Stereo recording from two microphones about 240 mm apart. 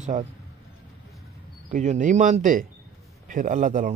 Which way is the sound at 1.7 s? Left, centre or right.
Right.